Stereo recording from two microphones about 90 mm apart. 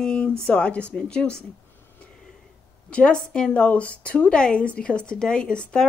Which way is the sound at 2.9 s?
10° left (ahead or behind).